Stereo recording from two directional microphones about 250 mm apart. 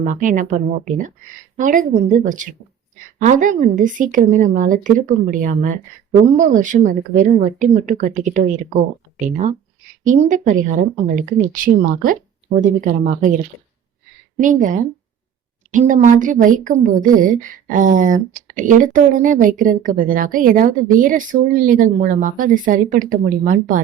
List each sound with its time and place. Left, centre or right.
0.0 s a woman's voice: right